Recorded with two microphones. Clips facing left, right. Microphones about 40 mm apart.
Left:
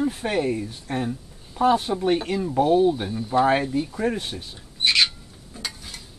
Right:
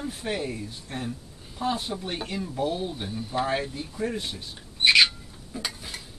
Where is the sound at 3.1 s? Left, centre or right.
Centre.